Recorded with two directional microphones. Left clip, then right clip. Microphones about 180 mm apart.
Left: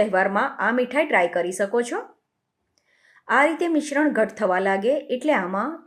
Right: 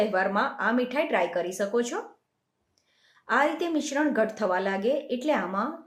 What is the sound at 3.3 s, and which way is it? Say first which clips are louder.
Speech: left 5 dB; 40° left (ahead or behind).